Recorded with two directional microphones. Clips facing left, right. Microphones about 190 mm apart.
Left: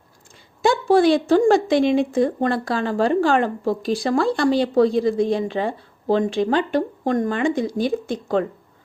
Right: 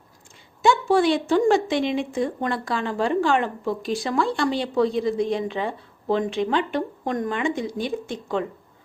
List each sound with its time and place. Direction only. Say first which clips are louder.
0.6 s a woman's voice: left 3 dB; 35° left (ahead or behind)